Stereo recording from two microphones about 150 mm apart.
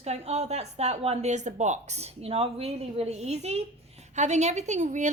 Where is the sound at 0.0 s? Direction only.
45° right (ahead or behind).